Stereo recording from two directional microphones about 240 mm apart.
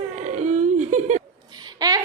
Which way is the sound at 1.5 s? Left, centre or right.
Centre.